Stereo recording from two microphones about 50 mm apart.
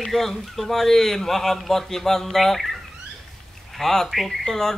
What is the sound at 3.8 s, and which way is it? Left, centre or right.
Speech, centre.